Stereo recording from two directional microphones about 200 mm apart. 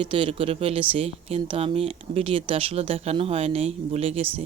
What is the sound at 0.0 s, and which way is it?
Speech, 25° right (ahead or behind).